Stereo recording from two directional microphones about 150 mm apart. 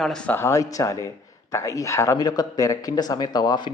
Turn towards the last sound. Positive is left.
turn(degrees=30)  # may be behind; listen again after turning